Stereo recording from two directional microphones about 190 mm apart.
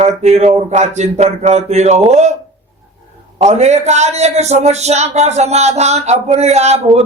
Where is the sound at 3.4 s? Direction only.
35° right (ahead or behind).